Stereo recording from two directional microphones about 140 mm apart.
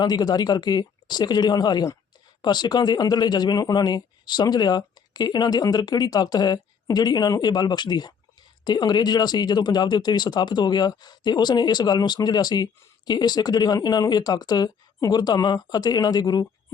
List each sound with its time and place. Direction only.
0.0 s speech: 30° left (ahead or behind)